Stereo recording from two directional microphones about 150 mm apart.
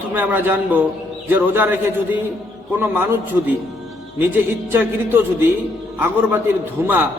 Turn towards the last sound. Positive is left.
turn(degrees=-15)  # may be behind; listen again after turning